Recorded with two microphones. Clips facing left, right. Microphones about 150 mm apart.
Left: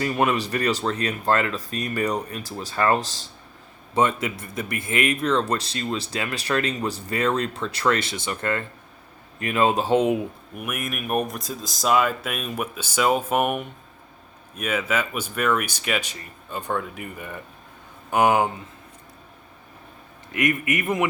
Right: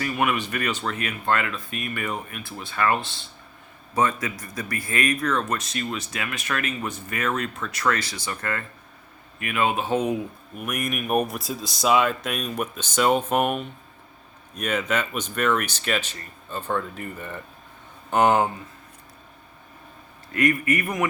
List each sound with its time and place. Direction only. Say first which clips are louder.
0.0 s speech: left 2 dB; 30° left (ahead or behind)
3.9 s speech: left 2 dB; 25° left (ahead or behind)
9.4 s speech: left 3 dB; 35° left (ahead or behind)
10.6 s speech: right 2 dB; 5° left (ahead or behind)
20.3 s speech: right 2 dB; 20° left (ahead or behind)